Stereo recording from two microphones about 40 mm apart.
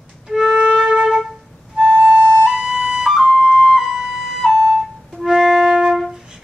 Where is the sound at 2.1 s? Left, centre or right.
Right.